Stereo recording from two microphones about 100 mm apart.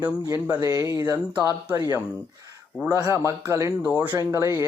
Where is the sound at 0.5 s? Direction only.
35° right (ahead or behind).